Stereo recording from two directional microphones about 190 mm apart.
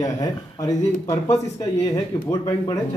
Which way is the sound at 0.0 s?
20° left (ahead or behind).